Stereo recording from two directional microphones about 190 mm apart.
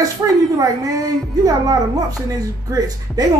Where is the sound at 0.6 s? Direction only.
20° right (ahead or behind).